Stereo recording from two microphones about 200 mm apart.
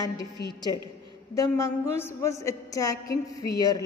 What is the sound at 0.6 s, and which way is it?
A woman's voice, 20° left (ahead or behind).